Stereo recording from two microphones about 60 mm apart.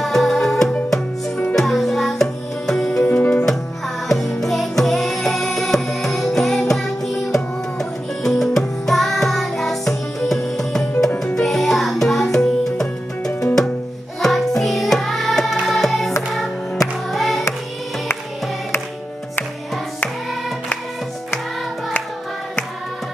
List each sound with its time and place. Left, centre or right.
0.0 s music: centre
3.1 s music: left
4.1 s music: centre